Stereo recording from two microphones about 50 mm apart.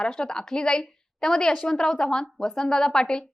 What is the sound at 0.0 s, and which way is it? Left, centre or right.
A woman's voice, centre.